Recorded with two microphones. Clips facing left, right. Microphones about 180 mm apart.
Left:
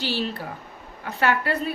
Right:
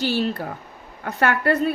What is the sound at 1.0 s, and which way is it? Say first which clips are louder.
Speech: right 3 dB; 50° right (ahead or behind).